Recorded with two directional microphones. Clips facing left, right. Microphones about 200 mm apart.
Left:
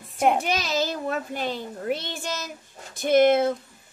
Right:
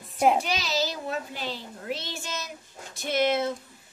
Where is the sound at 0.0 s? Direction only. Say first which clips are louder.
Even; centre (ahead or behind).